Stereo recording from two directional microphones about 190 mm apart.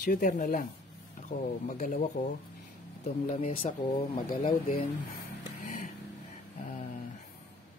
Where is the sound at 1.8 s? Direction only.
40° left (ahead or behind).